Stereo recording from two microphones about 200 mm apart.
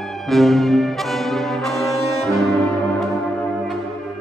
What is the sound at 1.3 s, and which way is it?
Brass instrument, centre (ahead or behind).